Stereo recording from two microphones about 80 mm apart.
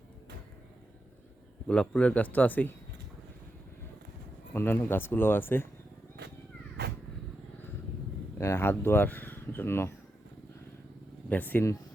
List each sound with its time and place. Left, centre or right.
1.6 s a man's voice: centre
4.5 s speech: left
8.4 s speech: left
11.3 s speech: left